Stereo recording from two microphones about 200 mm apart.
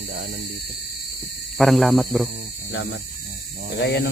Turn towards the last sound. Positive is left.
turn(degrees=60)  # may be behind; listen again after turning